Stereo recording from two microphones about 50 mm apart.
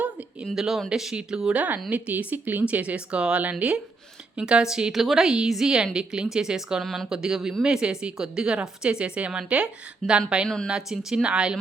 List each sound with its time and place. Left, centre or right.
0.5 s a woman's voice: centre
1.5 s a woman's voice: right; by 6.8 s centre
6.8 s speech: centre
7.1 s a woman's voice: centre